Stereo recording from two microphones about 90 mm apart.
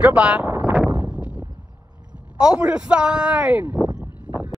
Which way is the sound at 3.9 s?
20° right (ahead or behind).